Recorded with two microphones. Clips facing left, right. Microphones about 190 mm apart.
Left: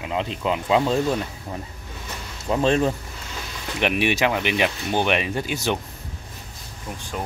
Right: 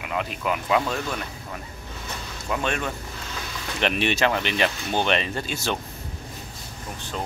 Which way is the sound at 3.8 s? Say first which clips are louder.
Left 2 dB; 10° left (ahead or behind).